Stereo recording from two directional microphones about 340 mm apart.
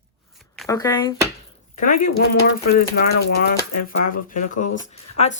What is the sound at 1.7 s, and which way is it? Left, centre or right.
Speech, left.